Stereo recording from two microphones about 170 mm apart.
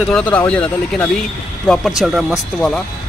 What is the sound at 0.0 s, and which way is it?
Speech, 5° left (ahead or behind).